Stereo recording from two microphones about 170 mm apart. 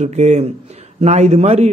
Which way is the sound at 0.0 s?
40° right (ahead or behind).